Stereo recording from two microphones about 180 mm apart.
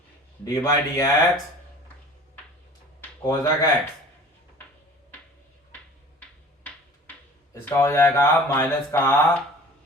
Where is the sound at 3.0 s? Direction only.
20° left (ahead or behind).